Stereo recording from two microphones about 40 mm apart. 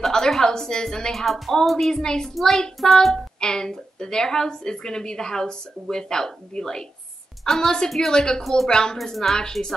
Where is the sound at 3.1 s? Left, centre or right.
Centre.